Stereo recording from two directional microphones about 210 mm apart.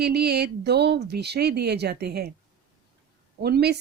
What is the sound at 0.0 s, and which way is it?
Speech, 50° right (ahead or behind).